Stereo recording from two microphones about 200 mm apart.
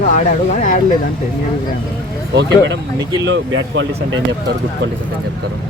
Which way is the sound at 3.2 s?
65° right (ahead or behind).